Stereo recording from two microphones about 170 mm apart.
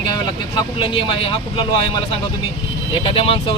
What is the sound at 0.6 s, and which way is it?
Speech, 30° left (ahead or behind).